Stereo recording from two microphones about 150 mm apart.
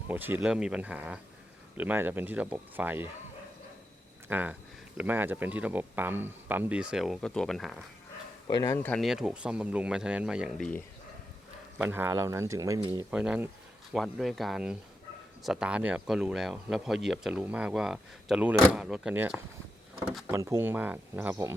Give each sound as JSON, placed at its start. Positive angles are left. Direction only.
{"t": 0.1, "sound": "speech", "side_deg": -10}
{"t": 4.3, "sound": "speech", "side_deg": -10}
{"t": 8.4, "sound": "speech", "side_deg": 25}
{"t": 8.9, "sound": "speech", "side_deg": 0}
{"t": 11.8, "sound": "speech", "side_deg": -15}
{"t": 13.1, "sound": "speech", "side_deg": -10}